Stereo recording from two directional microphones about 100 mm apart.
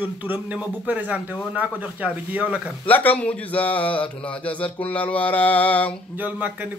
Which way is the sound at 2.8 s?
15° left (ahead or behind).